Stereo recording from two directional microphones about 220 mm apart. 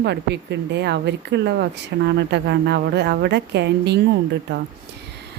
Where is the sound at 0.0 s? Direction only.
50° right (ahead or behind).